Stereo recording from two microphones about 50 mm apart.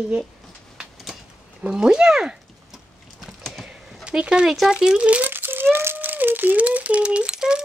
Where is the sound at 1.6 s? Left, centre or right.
Centre.